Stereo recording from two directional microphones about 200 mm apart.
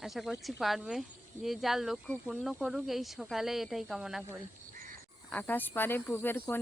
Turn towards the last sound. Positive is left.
turn(degrees=10)  # may be behind; listen again after turning